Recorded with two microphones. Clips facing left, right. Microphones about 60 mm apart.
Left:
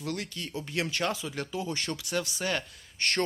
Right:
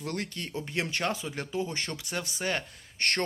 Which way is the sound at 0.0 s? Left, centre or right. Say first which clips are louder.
Even; right.